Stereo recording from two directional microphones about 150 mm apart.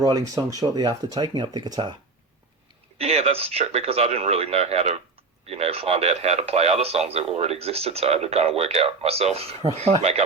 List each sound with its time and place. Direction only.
0.0 s speech: 25° right (ahead or behind)
3.0 s speech: 45° right (ahead or behind)